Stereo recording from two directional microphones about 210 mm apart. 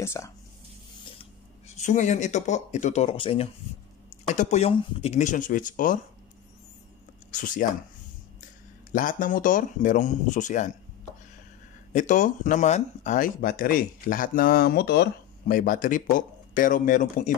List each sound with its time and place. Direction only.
0.0 s speech: 10° left (ahead or behind)
1.8 s speech: 35° left (ahead or behind)
7.2 s speech: 40° left (ahead or behind)
8.9 s speech: 40° left (ahead or behind)
11.9 s speech: 35° left (ahead or behind)